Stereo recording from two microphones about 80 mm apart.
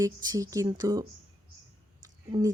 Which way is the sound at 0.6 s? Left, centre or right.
Right.